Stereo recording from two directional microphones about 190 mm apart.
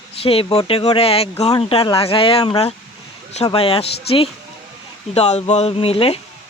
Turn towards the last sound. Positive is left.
turn(degrees=30)  # may be behind; listen again after turning